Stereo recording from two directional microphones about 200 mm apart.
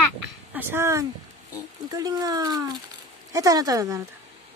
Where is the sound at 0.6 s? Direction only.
10° right (ahead or behind).